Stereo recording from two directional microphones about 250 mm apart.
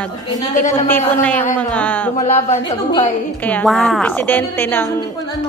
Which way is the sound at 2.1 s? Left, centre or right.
Left.